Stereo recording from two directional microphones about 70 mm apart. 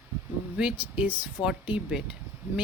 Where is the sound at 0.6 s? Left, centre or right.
Right.